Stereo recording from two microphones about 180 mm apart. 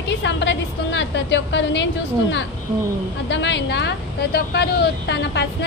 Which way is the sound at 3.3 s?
80° left.